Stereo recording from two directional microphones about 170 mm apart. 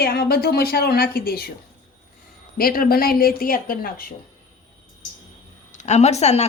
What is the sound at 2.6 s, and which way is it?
A woman's voice, 60° left (ahead or behind).